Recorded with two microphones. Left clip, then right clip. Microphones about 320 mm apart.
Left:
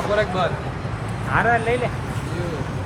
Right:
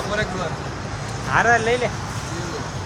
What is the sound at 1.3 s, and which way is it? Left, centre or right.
Speech, right.